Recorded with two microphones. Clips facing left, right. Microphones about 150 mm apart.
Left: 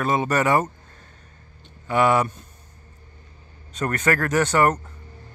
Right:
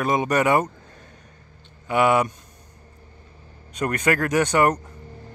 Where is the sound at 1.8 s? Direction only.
15° right (ahead or behind).